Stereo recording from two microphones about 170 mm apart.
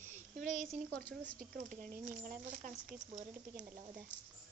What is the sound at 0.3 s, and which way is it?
Speech, 45° right (ahead or behind).